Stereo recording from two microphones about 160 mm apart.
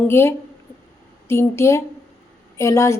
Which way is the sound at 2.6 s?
20° left (ahead or behind).